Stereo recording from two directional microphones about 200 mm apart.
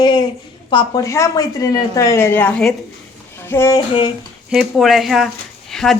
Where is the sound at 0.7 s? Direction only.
20° left (ahead or behind).